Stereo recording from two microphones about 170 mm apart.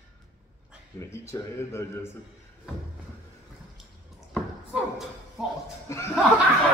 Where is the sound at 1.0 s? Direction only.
15° left (ahead or behind).